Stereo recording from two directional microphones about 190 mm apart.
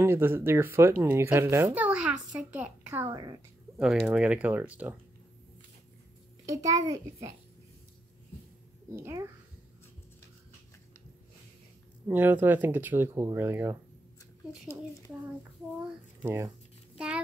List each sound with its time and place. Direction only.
0.0 s speech: 10° right (ahead or behind)
6.4 s a child's voice: 15° right (ahead or behind)
8.9 s speech: 15° right (ahead or behind)
12.1 s speech: 10° right (ahead or behind)
16.2 s speech: 15° right (ahead or behind)